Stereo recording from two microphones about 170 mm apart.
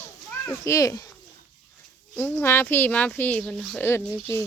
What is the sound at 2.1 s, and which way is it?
Speech, 10° left (ahead or behind).